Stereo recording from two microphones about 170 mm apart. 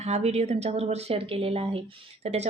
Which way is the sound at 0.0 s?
40° right (ahead or behind).